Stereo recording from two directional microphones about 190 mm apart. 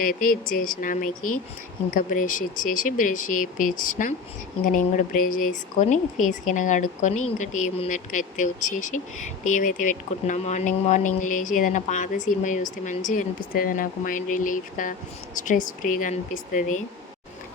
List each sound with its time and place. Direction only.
0.0 s speech: 50° left (ahead or behind)